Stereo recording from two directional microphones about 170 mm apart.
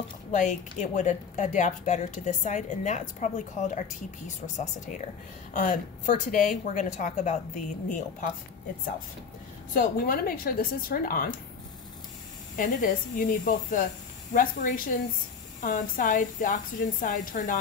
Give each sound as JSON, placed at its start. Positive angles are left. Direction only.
{"t": 0.3, "sound": "speech", "side_deg": 45}
{"t": 5.5, "sound": "speech", "side_deg": 50}
{"t": 9.8, "sound": "a woman's voice", "side_deg": 55}
{"t": 12.5, "sound": "speech", "side_deg": 55}